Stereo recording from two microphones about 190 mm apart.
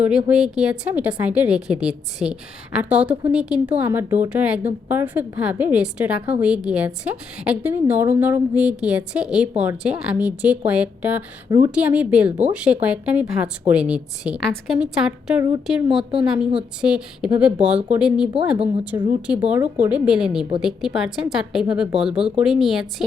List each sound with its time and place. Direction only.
0.0 s a woman's voice: 5° right (ahead or behind)
19.3 s a woman's voice: 5° right (ahead or behind)